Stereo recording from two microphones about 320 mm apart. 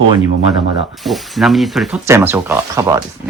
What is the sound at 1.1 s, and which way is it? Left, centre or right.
Speech, centre.